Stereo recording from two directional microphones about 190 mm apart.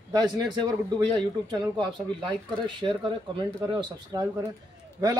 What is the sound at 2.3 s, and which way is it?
Speech, 25° right (ahead or behind).